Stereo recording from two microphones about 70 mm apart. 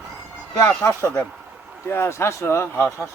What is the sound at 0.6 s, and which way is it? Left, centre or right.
A child's voice, left.